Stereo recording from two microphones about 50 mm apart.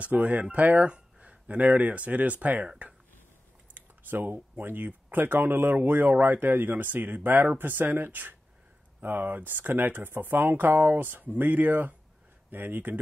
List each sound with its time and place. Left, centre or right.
0.0 s speech: right
0.8 s speech: right
3.7 s a sound: right
4.6 s speech: right